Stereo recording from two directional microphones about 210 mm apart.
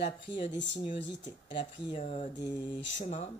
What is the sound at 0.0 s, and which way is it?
Speech, 55° left (ahead or behind).